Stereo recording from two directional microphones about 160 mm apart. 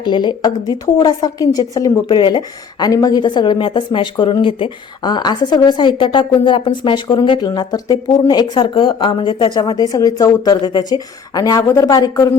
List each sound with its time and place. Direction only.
0.0 s a woman's voice: 30° left (ahead or behind)